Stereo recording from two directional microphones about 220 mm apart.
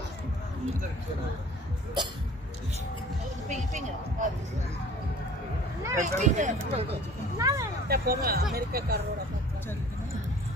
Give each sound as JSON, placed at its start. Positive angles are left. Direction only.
{"t": 3.4, "sound": "speech", "side_deg": -35}
{"t": 5.9, "sound": "speech", "side_deg": -30}
{"t": 7.3, "sound": "speech", "side_deg": -15}
{"t": 7.9, "sound": "speech", "side_deg": -45}